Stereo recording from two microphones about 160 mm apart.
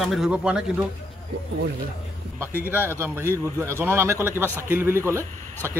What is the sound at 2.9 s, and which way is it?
Speech, 15° right (ahead or behind).